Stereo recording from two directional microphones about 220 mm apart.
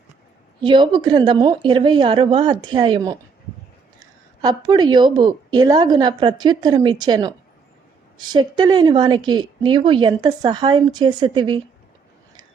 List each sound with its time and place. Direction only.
0.6 s speech: 20° right (ahead or behind)